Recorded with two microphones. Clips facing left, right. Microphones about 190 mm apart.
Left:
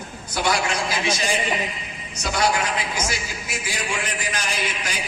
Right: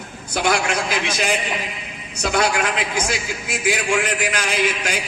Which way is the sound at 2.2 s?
55° right (ahead or behind).